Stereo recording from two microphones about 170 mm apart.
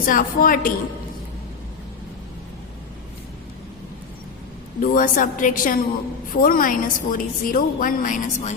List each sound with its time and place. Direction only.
0.0 s a woman's voice: 55° left (ahead or behind)
4.8 s a woman's voice: 50° left (ahead or behind)